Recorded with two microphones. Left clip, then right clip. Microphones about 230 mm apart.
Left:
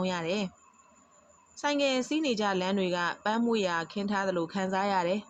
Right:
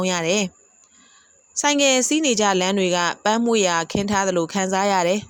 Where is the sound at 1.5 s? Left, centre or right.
Right.